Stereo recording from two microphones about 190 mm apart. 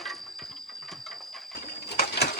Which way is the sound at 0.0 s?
Centre (ahead or behind).